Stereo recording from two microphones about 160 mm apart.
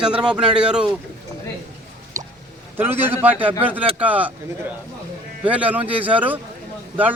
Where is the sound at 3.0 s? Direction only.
15° right (ahead or behind).